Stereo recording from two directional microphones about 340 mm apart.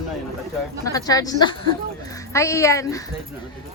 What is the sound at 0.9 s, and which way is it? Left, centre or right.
Speech, centre.